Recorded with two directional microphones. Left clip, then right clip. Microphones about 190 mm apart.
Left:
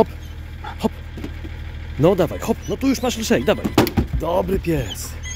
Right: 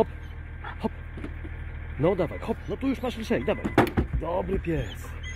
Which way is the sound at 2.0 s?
25° left (ahead or behind).